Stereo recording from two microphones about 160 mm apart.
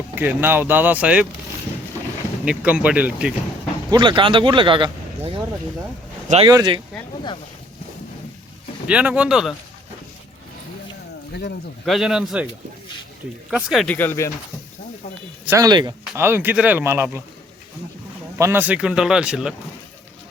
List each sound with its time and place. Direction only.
0.2 s speech: 10° right (ahead or behind)
2.4 s speech: 5° right (ahead or behind)
3.8 s speech: 25° right (ahead or behind)
6.4 s speech: 25° right (ahead or behind)
8.9 s speech: 10° right (ahead or behind)
11.9 s speech: centre (ahead or behind)
13.5 s speech: 5° right (ahead or behind)
13.8 s speech: 10° left (ahead or behind)
15.4 s speech: 20° right (ahead or behind)
16.1 s speech: 15° right (ahead or behind)
18.3 s speech: 15° right (ahead or behind)